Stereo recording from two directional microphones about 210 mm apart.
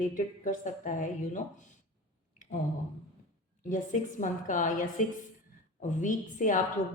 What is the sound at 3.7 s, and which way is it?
A woman's voice, 40° left (ahead or behind).